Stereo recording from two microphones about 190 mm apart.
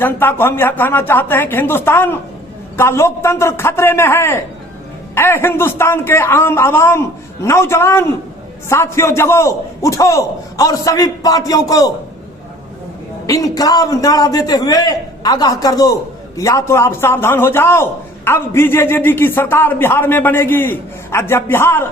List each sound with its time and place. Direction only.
0.0 s a man's voice: 10° left (ahead or behind)
13.2 s a man's voice: 15° left (ahead or behind)